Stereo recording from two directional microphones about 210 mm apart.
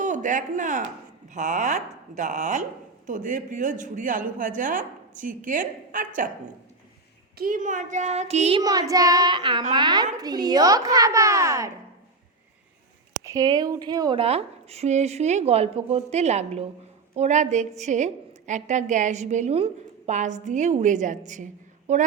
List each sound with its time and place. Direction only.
0.0 s a woman's voice: 35° right (ahead or behind)
7.3 s a woman's voice: 40° right (ahead or behind)
8.6 s a child's voice: 15° right (ahead or behind)
13.2 s a woman's voice: 15° right (ahead or behind); by 22.0 s 35° right (ahead or behind)